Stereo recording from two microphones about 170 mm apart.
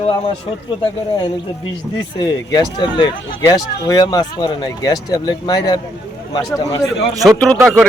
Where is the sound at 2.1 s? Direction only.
20° left (ahead or behind).